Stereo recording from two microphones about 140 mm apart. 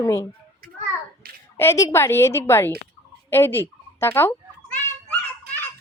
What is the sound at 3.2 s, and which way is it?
Fowl, 15° left (ahead or behind).